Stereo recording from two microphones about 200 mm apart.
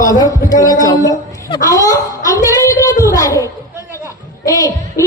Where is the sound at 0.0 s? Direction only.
20° left (ahead or behind).